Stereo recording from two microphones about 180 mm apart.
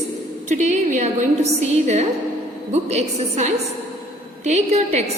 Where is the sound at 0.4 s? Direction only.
40° right (ahead or behind).